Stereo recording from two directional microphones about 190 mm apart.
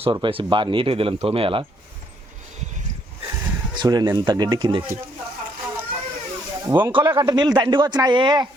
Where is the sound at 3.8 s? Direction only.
20° right (ahead or behind).